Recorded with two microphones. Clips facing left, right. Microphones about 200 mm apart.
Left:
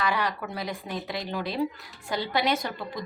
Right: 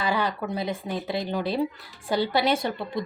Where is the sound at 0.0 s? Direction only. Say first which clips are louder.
Right 2 dB; 25° right (ahead or behind).